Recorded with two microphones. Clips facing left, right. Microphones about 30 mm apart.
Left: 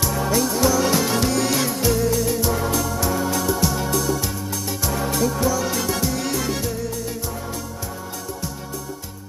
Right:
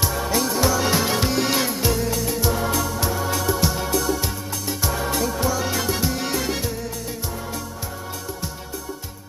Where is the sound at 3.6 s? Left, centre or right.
Centre.